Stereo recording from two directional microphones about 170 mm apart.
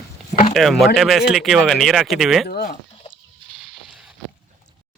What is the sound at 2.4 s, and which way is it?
Speech, 65° left (ahead or behind).